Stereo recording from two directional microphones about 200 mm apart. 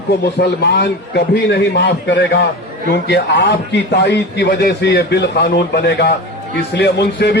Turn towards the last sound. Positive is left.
turn(degrees=55)  # may be behind; listen again after turning